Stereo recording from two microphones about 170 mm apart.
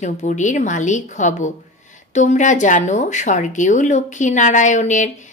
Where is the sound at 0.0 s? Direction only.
45° left (ahead or behind).